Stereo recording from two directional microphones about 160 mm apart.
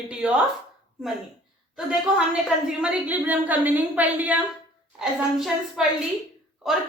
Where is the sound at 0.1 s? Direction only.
5° right (ahead or behind).